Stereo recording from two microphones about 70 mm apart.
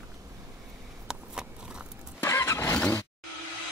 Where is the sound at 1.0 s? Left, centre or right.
Centre.